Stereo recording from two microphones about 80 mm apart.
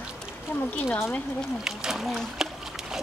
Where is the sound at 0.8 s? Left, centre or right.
Left.